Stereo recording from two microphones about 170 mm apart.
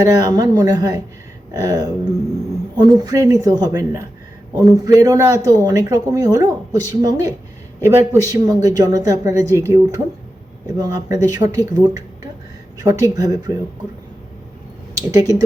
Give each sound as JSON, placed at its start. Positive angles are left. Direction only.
{"t": 0.0, "sound": "speech", "side_deg": -20}
{"t": 15.1, "sound": "speech", "side_deg": -20}